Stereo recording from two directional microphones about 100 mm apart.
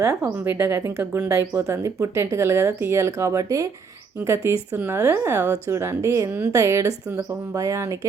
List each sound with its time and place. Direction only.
0.0 s speech: 30° right (ahead or behind)